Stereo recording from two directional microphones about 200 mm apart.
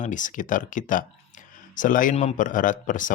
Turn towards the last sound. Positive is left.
turn(degrees=40)  # may be behind; listen again after turning